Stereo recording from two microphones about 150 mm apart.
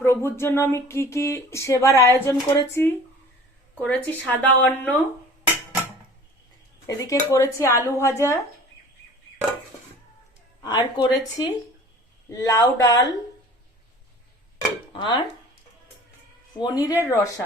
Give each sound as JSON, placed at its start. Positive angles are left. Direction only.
{"t": 0.0, "sound": "speech", "side_deg": 15}
{"t": 6.8, "sound": "speech", "side_deg": 20}
{"t": 10.6, "sound": "speech", "side_deg": 25}
{"t": 14.9, "sound": "speech", "side_deg": 30}
{"t": 16.6, "sound": "speech", "side_deg": 25}